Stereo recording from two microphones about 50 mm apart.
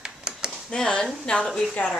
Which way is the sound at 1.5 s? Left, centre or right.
Centre.